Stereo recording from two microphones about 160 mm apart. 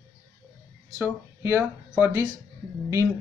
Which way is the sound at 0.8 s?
15° right (ahead or behind).